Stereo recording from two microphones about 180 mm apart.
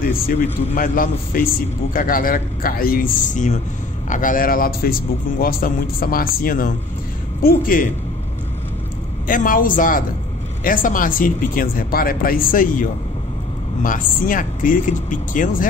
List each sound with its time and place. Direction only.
0.7 s speech: 50° left (ahead or behind)
9.3 s speech: 50° left (ahead or behind)
13.8 s speech: 50° left (ahead or behind)